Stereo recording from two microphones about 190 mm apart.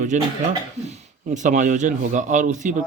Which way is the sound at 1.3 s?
40° right (ahead or behind).